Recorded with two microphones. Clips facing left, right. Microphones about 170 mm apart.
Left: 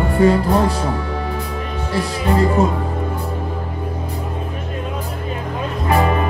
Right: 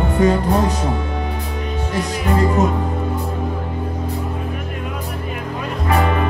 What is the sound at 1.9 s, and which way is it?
Music, 35° left (ahead or behind).